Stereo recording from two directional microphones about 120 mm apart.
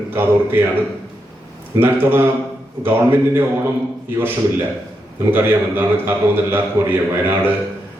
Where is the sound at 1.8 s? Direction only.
20° right (ahead or behind).